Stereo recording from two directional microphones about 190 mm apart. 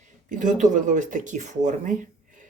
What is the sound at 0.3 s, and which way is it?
A man's voice, 40° right (ahead or behind).